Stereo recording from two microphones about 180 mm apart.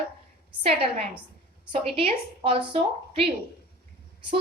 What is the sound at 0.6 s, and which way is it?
Speech, 30° right (ahead or behind).